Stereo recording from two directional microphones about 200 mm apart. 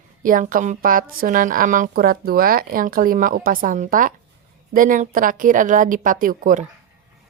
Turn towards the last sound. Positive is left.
turn(degrees=-40)  # may be behind; listen again after turning